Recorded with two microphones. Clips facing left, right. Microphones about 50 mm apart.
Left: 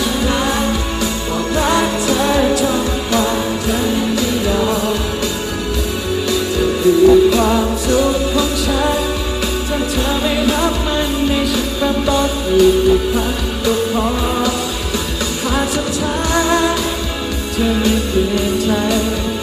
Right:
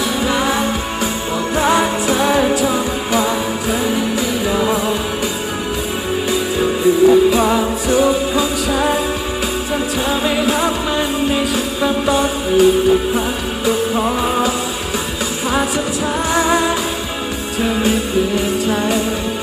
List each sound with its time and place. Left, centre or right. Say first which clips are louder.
0.3 s music: even; right
4.5 s music: right 2 dB; right
6.6 s music: left 1 dB; right
10.2 s music: left 1 dB; right
16.3 s music: left 1 dB; centre